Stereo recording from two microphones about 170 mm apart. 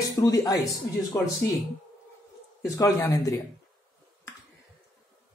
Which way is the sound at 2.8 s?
20° left (ahead or behind).